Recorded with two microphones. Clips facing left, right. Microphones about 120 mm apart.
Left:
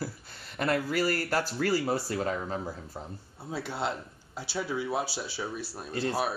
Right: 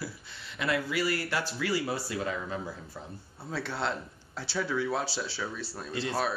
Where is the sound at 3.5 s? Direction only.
10° left (ahead or behind).